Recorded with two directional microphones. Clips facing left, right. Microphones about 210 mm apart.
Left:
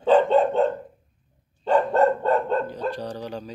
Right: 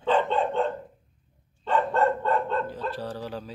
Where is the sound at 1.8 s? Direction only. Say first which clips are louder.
Left 4 dB; 40° left (ahead or behind).